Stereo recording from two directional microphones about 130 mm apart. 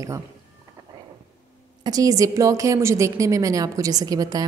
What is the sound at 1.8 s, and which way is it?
A woman's voice, 30° right (ahead or behind).